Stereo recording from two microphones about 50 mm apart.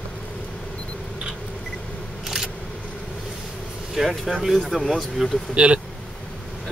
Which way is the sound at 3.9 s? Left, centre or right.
Centre.